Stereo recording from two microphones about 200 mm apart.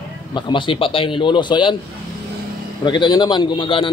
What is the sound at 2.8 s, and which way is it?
A man's voice, 20° left (ahead or behind).